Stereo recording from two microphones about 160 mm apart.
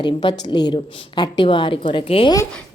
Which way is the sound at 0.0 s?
30° left (ahead or behind).